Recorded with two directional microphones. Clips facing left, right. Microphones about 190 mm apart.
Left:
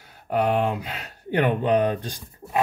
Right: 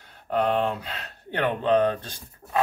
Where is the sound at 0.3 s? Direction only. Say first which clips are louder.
Left 2 dB; 10° left (ahead or behind).